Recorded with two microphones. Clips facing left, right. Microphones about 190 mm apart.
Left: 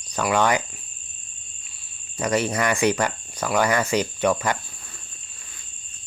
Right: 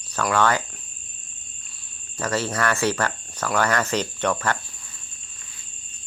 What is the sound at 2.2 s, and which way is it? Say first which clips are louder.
Speech: left 2 dB; 15° left (ahead or behind).